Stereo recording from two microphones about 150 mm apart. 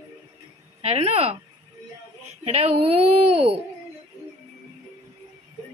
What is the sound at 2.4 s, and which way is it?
Speech, 45° right (ahead or behind).